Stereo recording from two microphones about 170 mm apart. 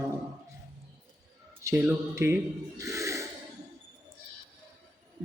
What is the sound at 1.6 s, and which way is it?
A man's voice, 10° right (ahead or behind).